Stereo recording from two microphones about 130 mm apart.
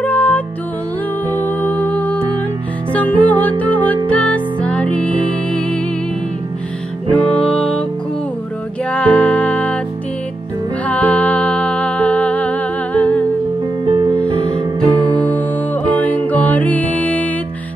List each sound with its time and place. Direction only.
0.0 s music: 10° left (ahead or behind)
7.3 s music: 5° left (ahead or behind)
8.9 s music: 10° left (ahead or behind)
10.9 s music: 10° left (ahead or behind)
13.8 s music: 40° right (ahead or behind)
15.2 s music: 10° left (ahead or behind)